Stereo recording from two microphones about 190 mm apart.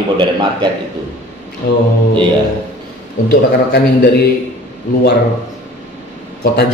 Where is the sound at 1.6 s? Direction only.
55° left (ahead or behind).